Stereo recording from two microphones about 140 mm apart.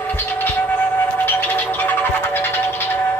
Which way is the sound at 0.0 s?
15° left (ahead or behind).